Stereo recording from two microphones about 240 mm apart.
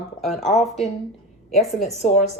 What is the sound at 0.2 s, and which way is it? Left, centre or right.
A woman's voice, centre.